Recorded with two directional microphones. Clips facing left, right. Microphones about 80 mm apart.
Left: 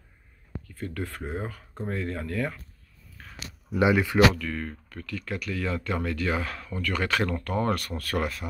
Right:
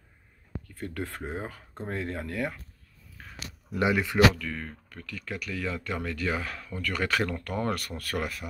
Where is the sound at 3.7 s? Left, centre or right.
Centre.